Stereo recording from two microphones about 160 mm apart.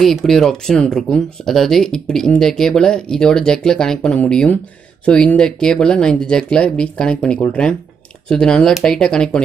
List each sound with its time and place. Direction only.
0.0 s speech: centre (ahead or behind)